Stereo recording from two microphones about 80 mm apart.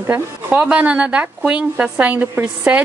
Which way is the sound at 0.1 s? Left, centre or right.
Right.